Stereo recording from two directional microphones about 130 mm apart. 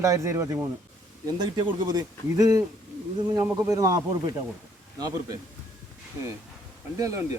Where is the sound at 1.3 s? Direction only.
35° right (ahead or behind).